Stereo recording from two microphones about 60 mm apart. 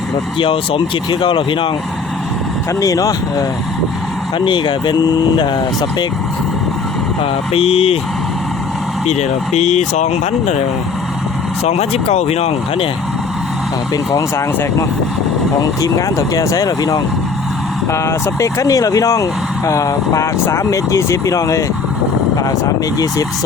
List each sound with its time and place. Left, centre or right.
2.8 s speech: left
13.9 s speech: left
15.8 s speech: left
17.9 s speech: left